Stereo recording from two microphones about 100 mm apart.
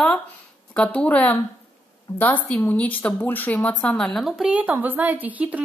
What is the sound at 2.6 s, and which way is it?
Speech, 15° left (ahead or behind).